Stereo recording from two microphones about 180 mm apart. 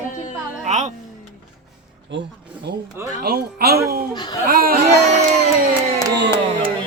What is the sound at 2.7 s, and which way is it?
Speech, 70° right (ahead or behind).